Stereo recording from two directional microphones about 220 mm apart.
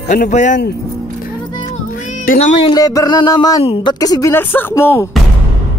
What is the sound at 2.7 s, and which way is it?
Speech, 15° left (ahead or behind).